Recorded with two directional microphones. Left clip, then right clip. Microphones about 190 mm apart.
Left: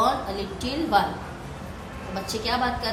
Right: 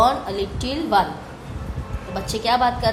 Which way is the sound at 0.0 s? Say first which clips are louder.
Right 5 dB; 50° right (ahead or behind).